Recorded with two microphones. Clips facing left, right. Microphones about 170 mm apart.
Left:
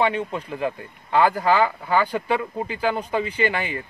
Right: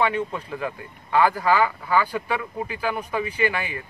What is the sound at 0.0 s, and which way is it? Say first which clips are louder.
Speech: left 1 dB; 25° left (ahead or behind).